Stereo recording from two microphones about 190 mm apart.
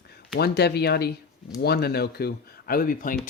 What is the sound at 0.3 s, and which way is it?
Speech, 60° left (ahead or behind).